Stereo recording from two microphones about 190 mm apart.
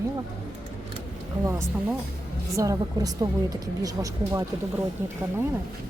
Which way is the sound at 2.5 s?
20° right (ahead or behind).